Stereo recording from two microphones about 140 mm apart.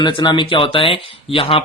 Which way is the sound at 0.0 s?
30° left (ahead or behind).